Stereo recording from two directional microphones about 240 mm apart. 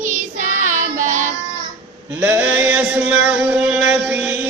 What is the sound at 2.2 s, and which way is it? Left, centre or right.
Music, centre.